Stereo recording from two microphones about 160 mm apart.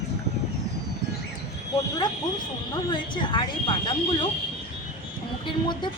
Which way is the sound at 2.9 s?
30° left (ahead or behind).